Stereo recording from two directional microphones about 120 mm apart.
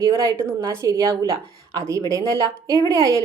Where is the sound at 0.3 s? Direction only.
25° right (ahead or behind).